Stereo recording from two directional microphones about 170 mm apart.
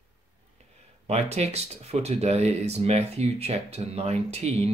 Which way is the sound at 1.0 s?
40° right (ahead or behind).